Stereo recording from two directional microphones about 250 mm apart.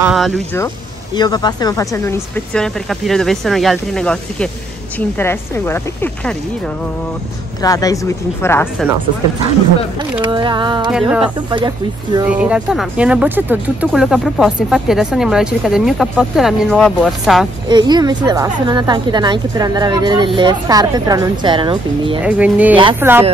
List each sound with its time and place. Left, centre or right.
0.0 s speech: centre
1.1 s speech: centre
10.2 s speech: centre
10.9 s speech: centre
11.5 s speech: centre
12.3 s speech: centre
17.6 s speech: centre
22.2 s speech: centre